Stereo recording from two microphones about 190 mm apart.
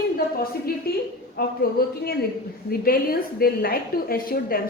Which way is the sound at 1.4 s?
55° left (ahead or behind).